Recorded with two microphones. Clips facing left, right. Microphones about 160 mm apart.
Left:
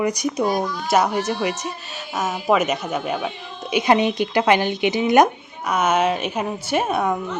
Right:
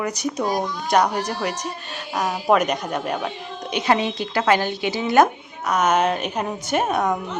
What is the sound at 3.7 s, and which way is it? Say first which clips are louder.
Speech: left 3 dB; 15° left (ahead or behind).